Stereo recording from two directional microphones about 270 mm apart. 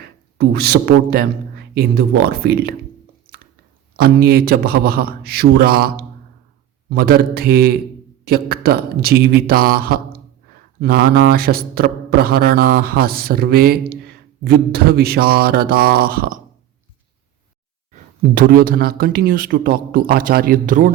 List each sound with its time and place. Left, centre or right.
0.3 s speech: right
3.9 s speech: right
18.3 s speech: right